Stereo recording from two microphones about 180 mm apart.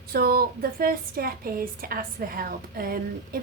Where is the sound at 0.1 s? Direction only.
60° right (ahead or behind).